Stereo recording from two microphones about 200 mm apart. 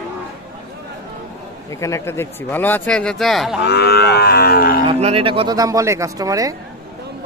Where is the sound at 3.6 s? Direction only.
55° left (ahead or behind).